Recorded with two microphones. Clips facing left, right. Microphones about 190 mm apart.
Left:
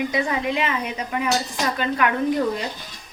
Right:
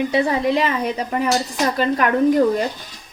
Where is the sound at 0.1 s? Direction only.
35° right (ahead or behind).